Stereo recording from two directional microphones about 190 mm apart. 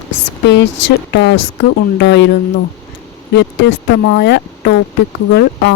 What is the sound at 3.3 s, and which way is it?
Speech, 70° left (ahead or behind).